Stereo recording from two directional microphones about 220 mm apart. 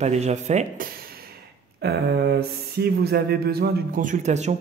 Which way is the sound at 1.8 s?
45° right (ahead or behind).